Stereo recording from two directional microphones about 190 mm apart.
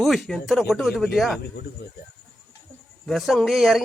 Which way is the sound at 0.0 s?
Centre (ahead or behind).